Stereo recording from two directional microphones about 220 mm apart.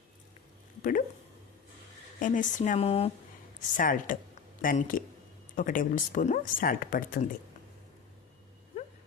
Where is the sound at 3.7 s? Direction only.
40° left (ahead or behind).